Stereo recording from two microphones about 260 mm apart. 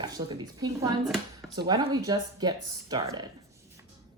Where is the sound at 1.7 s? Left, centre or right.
Centre.